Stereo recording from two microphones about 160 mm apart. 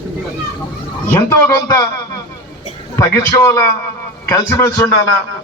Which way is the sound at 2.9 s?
15° left (ahead or behind).